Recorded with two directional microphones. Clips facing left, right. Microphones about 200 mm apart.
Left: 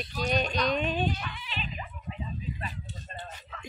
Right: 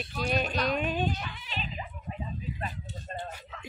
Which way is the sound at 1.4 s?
45° right (ahead or behind).